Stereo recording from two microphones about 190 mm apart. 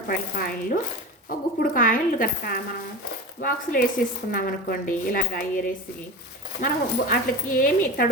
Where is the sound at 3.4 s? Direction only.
45° left (ahead or behind).